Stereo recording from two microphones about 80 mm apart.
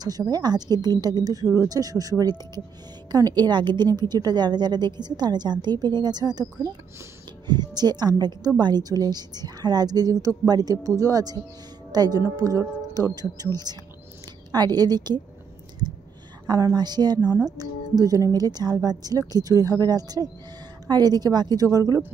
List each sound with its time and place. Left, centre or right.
0.3 s a woman's voice: right
16.4 s a woman's voice: right